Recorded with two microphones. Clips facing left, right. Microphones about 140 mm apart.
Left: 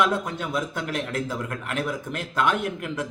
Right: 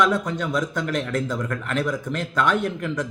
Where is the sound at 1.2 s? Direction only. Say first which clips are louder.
Right 3 dB; 10° left (ahead or behind).